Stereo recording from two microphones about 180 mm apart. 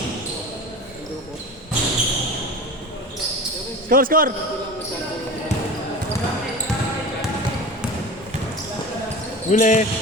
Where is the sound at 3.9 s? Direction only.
50° right (ahead or behind).